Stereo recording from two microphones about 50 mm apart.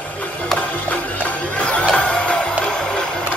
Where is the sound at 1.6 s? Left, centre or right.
Left.